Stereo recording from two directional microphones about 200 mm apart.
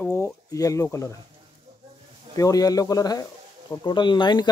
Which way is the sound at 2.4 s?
15° left (ahead or behind).